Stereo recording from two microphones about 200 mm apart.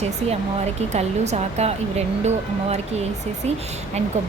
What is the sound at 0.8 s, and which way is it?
Speech, 35° right (ahead or behind).